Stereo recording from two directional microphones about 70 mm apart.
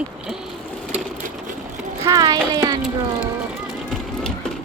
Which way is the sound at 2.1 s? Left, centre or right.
Right.